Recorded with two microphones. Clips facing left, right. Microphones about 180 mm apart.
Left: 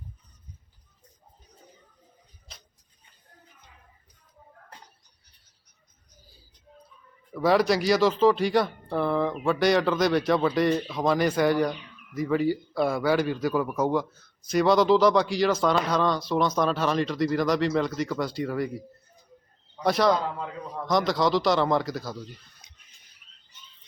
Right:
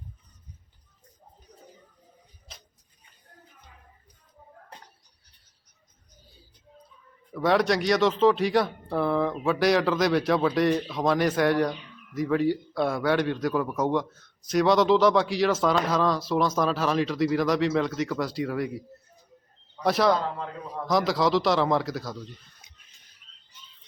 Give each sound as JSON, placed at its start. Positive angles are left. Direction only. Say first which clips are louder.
{"t": 7.3, "sound": "speech", "louder": "left 1 dB", "side_deg": 0}
{"t": 19.8, "sound": "speech", "louder": "even", "side_deg": 0}